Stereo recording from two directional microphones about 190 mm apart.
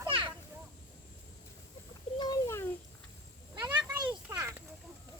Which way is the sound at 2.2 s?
20° left (ahead or behind).